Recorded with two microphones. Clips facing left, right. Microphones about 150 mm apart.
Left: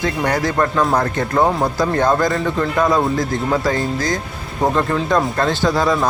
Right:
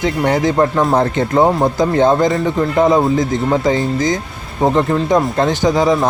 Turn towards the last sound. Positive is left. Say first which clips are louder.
# right 3 dB
turn(degrees=-20)  # may be behind; listen again after turning